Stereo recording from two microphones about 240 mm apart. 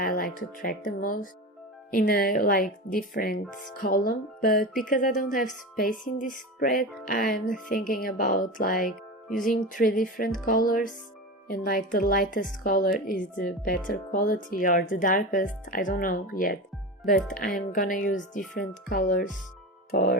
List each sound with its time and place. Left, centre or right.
0.0 s music: left
0.3 s speech: left
17.2 s speech: centre
17.4 s speech: left